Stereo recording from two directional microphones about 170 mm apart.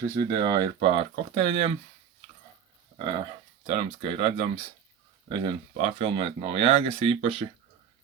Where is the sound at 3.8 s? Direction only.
35° right (ahead or behind).